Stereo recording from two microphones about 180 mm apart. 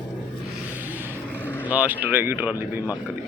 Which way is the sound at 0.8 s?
10° right (ahead or behind).